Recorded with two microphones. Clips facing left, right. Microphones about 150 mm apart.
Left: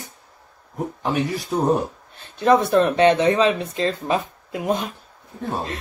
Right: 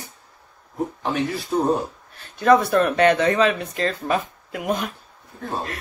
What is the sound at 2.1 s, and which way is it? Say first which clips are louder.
Speech: right 1 dB; 25° left (ahead or behind).